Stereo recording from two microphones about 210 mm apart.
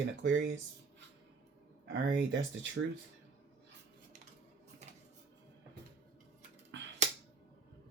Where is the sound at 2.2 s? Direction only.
55° right (ahead or behind).